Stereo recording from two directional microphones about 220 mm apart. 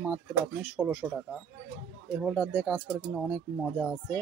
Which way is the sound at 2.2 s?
Centre (ahead or behind).